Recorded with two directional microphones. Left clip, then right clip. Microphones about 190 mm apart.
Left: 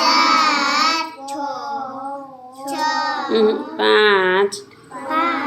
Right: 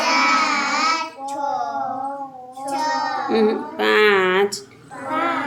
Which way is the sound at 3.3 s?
55° left (ahead or behind).